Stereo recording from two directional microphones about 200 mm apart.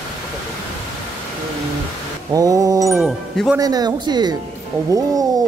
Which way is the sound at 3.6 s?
20° right (ahead or behind).